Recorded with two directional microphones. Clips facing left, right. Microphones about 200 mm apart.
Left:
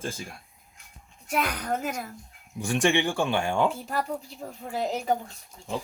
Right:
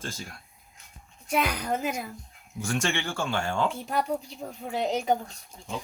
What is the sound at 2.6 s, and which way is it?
Speech, 15° left (ahead or behind).